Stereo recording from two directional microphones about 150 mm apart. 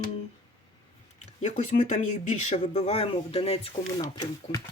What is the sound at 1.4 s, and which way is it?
Speech, 55° left (ahead or behind).